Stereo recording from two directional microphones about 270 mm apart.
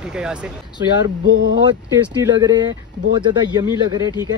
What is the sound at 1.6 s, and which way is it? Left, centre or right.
Speech, centre.